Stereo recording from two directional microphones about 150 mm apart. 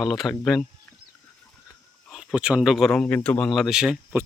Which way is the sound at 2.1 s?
5° right (ahead or behind).